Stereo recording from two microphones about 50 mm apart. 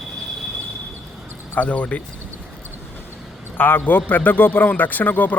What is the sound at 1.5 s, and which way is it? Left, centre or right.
Speech, left.